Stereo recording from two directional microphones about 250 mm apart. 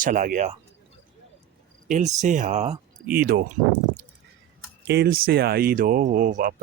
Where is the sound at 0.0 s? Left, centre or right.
Right.